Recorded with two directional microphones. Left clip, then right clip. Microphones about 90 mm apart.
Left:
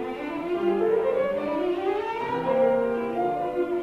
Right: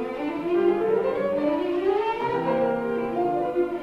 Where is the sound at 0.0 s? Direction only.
30° left (ahead or behind).